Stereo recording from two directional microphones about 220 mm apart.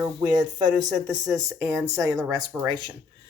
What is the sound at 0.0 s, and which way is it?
Speech, 15° right (ahead or behind).